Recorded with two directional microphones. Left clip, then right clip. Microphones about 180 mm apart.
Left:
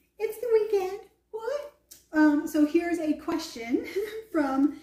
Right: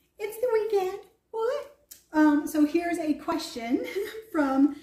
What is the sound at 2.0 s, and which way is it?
A woman's voice, 20° right (ahead or behind).